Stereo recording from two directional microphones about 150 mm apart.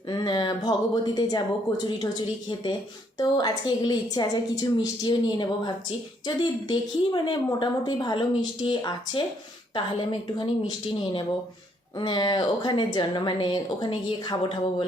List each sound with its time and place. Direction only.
0.1 s a woman's voice: 30° left (ahead or behind)
3.2 s a woman's voice: 25° left (ahead or behind)